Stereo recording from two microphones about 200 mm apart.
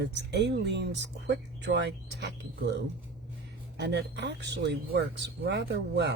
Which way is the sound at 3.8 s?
60° right (ahead or behind).